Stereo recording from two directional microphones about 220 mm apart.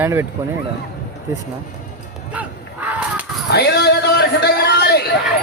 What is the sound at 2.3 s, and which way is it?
Honk, 5° right (ahead or behind).